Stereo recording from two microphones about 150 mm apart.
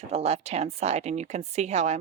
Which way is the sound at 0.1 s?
45° right (ahead or behind).